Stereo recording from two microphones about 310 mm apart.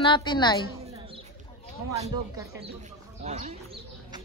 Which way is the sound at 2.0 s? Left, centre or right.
Centre.